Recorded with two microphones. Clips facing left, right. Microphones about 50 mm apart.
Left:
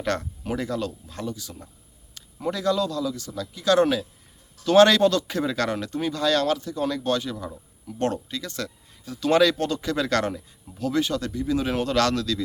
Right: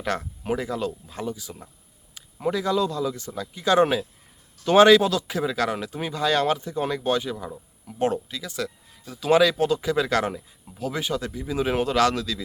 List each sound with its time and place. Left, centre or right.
0.0 s a man's voice: centre